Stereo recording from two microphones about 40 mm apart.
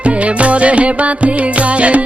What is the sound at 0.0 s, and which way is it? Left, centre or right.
Music, right.